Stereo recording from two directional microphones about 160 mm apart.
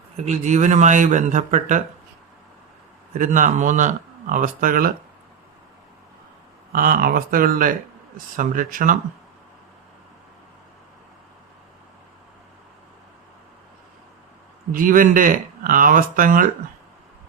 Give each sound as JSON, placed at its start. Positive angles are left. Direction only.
{"t": 0.3, "sound": "speech", "side_deg": -50}
{"t": 3.1, "sound": "speech", "side_deg": -55}
{"t": 6.7, "sound": "speech", "side_deg": -60}
{"t": 14.7, "sound": "speech", "side_deg": -60}